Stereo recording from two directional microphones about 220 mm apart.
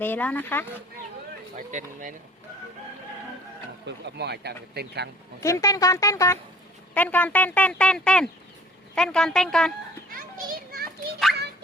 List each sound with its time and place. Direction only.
0.0 s a woman's voice: 10° left (ahead or behind)
1.5 s speech: 35° right (ahead or behind)
3.8 s speech: 50° right (ahead or behind)
5.4 s a woman's voice: 15° left (ahead or behind)
10.1 s children playing: 40° right (ahead or behind)